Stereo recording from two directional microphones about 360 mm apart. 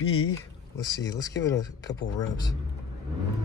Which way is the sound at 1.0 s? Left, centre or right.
Centre.